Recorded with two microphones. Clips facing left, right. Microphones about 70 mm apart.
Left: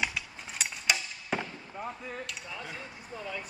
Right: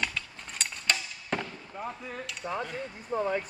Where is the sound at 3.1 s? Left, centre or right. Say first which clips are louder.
Right 11 dB; right.